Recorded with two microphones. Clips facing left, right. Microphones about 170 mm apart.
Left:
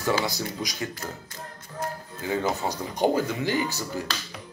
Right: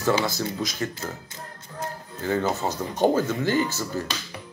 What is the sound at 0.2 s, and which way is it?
Speech, 15° left (ahead or behind).